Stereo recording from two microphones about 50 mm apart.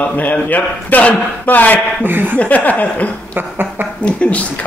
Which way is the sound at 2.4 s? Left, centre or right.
Left.